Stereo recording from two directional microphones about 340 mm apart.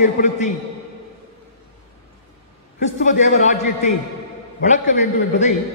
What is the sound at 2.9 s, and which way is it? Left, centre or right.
Speech, left.